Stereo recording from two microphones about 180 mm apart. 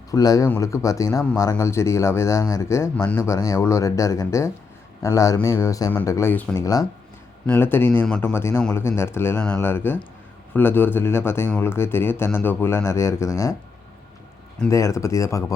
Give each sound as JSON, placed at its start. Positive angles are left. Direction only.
{"t": 0.1, "sound": "speech", "side_deg": 20}
{"t": 14.7, "sound": "speech", "side_deg": 15}